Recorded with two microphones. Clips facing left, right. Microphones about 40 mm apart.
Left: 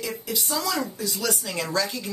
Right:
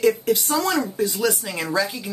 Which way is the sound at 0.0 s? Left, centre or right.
Right.